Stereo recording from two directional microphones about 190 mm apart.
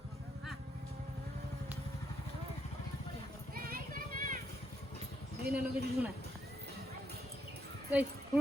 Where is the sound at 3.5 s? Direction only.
50° right (ahead or behind).